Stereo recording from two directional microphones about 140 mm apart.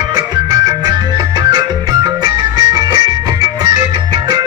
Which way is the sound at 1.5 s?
30° right (ahead or behind).